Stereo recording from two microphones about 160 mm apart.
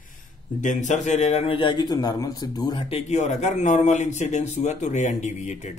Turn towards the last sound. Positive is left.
turn(degrees=45)  # may be behind; listen again after turning